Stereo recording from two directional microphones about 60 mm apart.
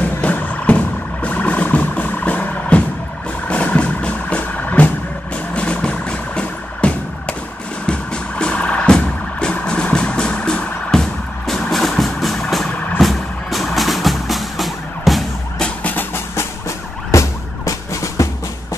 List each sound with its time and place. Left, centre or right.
0.2 s music: left
3.4 s vehicle: left
5.5 s music: centre
13.0 s vehicle: centre
15.8 s music: left
16.3 s emergency vehicle: left